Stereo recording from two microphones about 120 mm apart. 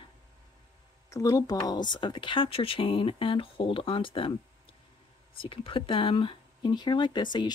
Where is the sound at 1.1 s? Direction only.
25° left (ahead or behind).